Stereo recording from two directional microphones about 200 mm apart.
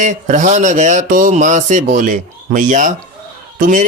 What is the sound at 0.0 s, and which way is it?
A man's voice, 40° right (ahead or behind).